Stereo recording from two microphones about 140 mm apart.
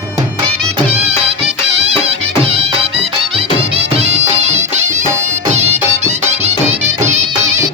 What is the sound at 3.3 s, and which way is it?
Music, 45° right (ahead or behind).